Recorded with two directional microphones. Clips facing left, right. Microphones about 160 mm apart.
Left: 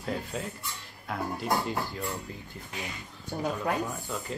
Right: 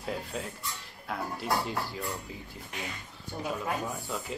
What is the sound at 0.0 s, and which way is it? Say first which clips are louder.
Speech: left 2 dB; centre (ahead or behind).